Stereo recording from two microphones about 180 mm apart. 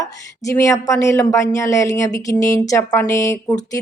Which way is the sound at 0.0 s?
15° left (ahead or behind).